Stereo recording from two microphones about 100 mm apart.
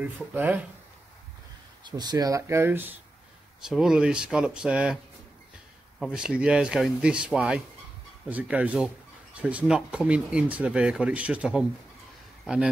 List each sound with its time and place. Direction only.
0.0 s speech: 20° right (ahead or behind)
1.9 s speech: 45° right (ahead or behind); by 3.0 s 20° right (ahead or behind)
3.6 s speech: 5° right (ahead or behind)
5.9 s speech: 10° right (ahead or behind)